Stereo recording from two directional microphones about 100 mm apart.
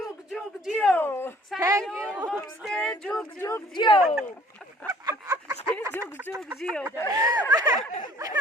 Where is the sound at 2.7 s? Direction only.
10° left (ahead or behind).